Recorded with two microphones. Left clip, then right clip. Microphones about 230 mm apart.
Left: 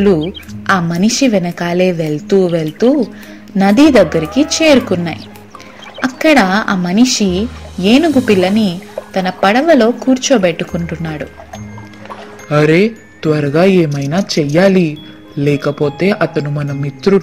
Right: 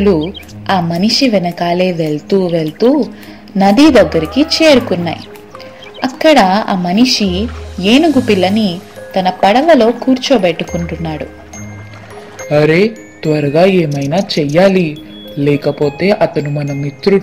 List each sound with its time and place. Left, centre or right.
0.7 s speech: left
12.4 s speech: left
13.8 s speech: centre
14.2 s speech: left